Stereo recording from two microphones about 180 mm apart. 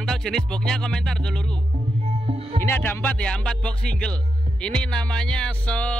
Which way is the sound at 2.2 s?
30° right (ahead or behind).